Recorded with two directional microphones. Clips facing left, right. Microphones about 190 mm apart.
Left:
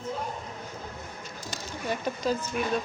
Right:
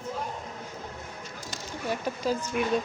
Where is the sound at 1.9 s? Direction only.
10° right (ahead or behind).